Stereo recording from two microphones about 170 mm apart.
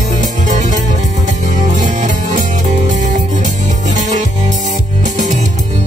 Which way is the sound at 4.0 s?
45° right (ahead or behind).